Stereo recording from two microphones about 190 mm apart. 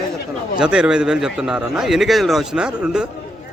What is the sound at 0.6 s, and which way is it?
A man's voice, 5° right (ahead or behind).